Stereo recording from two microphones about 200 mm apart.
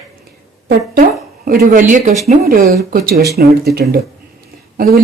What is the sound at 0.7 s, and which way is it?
Speech, 50° right (ahead or behind).